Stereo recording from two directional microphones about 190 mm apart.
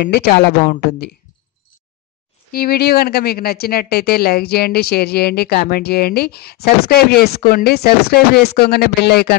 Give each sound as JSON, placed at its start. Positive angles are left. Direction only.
{"t": 0.4, "sound": "speech", "side_deg": 55}
{"t": 2.5, "sound": "speech", "side_deg": 55}